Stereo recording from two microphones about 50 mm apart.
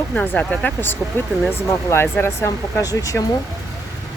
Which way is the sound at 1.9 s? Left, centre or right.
Left.